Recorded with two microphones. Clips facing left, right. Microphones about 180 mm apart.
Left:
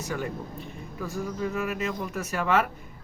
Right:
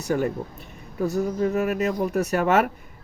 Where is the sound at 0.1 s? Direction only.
40° right (ahead or behind).